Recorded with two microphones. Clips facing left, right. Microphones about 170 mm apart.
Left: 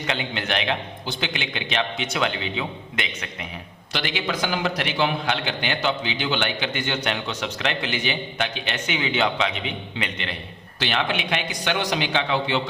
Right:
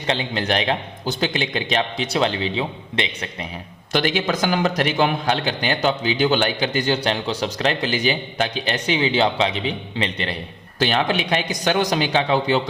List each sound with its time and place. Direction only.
0.1 s a man's voice: 35° right (ahead or behind)
3.9 s a man's voice: 45° right (ahead or behind)